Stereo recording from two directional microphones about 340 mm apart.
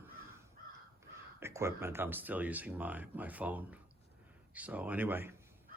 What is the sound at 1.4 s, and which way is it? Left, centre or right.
Speech, centre.